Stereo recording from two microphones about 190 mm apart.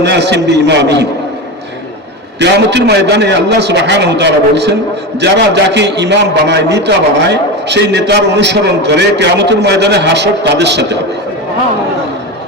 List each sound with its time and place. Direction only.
0.0 s a man's voice: 65° right (ahead or behind)
2.4 s a man's voice: 65° right (ahead or behind)